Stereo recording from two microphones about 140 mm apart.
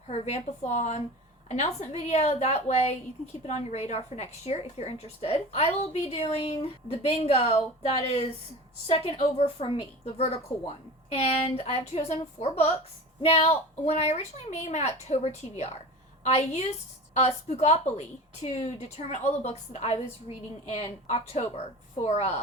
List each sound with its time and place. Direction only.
0.1 s a woman's voice: 50° left (ahead or behind)
10.5 s a woman's voice: 10° left (ahead or behind)
11.1 s a woman's voice: 45° left (ahead or behind)